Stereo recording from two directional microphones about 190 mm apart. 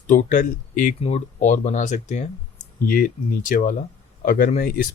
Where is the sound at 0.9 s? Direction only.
35° left (ahead or behind).